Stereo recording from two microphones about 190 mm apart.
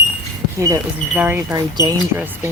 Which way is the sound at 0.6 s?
10° right (ahead or behind).